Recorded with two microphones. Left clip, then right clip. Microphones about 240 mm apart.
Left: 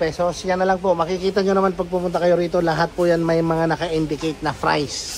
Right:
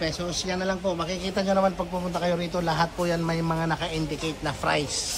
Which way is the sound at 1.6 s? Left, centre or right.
Left.